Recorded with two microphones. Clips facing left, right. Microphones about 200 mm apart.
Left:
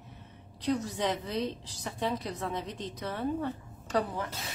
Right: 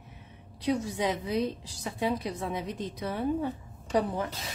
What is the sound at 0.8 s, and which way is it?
A woman's voice, 10° right (ahead or behind).